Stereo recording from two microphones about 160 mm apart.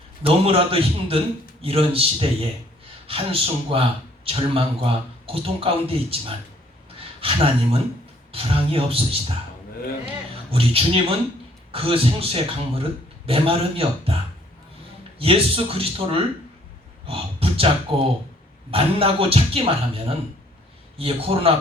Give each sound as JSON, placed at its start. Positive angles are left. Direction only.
{"t": 0.2, "sound": "a man's voice", "side_deg": -35}
{"t": 10.5, "sound": "a man's voice", "side_deg": -35}
{"t": 15.2, "sound": "a man's voice", "side_deg": -35}